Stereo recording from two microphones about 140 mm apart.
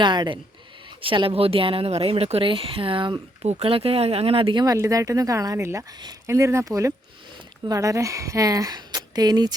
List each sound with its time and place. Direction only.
0.0 s speech: 35° right (ahead or behind)
4.6 s speech: 25° right (ahead or behind)